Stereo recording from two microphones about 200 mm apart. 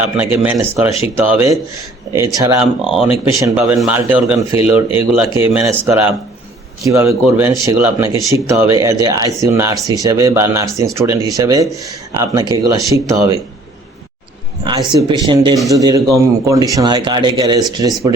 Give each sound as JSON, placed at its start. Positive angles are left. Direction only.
{"t": 0.0, "sound": "speech", "side_deg": -10}
{"t": 2.8, "sound": "speech", "side_deg": 0}
{"t": 3.2, "sound": "speech", "side_deg": -15}
{"t": 14.6, "sound": "speech", "side_deg": -20}